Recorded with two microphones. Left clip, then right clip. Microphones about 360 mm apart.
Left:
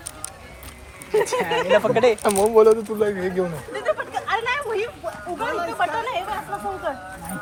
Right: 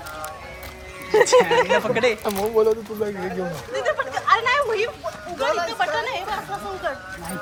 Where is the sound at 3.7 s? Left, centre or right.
Centre.